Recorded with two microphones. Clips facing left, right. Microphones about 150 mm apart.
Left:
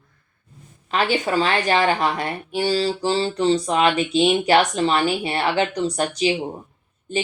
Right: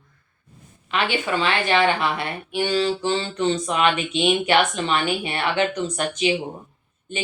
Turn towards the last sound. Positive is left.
turn(degrees=35)  # may be behind; listen again after turning